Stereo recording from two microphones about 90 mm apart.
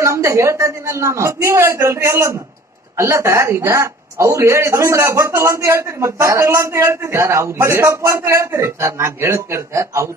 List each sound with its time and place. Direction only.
0.0 s speech: 35° right (ahead or behind)